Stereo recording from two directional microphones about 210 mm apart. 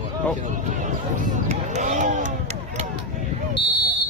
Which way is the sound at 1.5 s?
35° right (ahead or behind).